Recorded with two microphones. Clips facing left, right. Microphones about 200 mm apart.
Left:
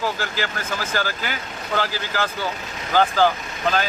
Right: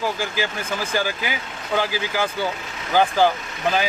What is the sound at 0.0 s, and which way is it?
A man's voice, 15° right (ahead or behind).